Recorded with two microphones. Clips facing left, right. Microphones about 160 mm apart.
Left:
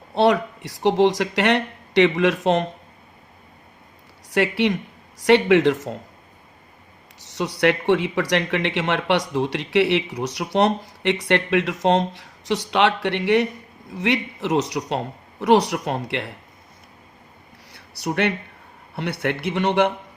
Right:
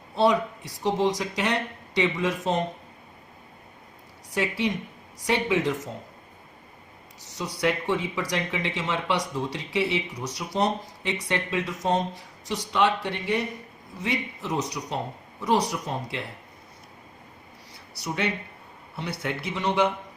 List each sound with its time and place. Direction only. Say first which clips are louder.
0.1 s speech: left 4 dB; 70° left (ahead or behind)
4.3 s speech: left 6 dB; 70° left (ahead or behind)
7.3 s speech: left 6 dB; 70° left (ahead or behind)
17.7 s a sound: left 7 dB; 65° left (ahead or behind)
18.9 s speech: left 6 dB; 60° left (ahead or behind)